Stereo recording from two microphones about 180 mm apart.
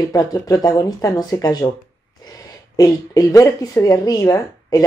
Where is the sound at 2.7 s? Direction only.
20° left (ahead or behind).